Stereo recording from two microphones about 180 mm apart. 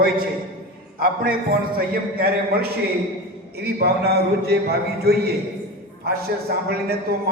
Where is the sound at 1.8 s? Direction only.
60° right (ahead or behind).